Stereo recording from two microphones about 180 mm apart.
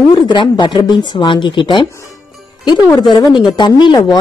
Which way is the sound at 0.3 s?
25° left (ahead or behind).